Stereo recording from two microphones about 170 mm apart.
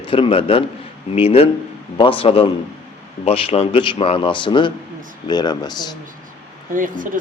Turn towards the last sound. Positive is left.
turn(degrees=-50)  # may be behind; listen again after turning